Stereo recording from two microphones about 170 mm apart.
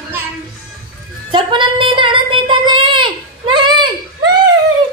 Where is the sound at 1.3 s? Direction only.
30° right (ahead or behind).